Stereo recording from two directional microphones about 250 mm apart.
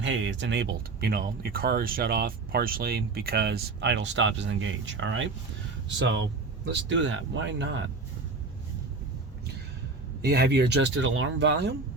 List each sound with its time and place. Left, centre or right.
0.0 s speech: right
10.2 s speech: right